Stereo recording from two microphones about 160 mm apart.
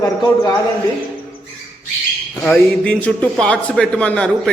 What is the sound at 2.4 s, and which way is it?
A man's voice, 10° left (ahead or behind).